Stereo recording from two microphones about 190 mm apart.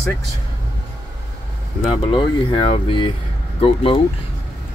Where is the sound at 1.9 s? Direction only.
25° left (ahead or behind).